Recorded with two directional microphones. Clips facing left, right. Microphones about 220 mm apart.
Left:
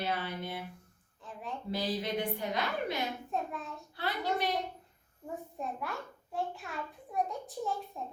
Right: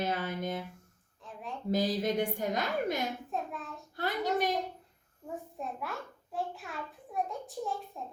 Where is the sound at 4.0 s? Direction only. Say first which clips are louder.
Right 2 dB; 45° right (ahead or behind).